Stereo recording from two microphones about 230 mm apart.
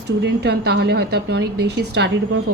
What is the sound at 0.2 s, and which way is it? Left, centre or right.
A woman's voice, right.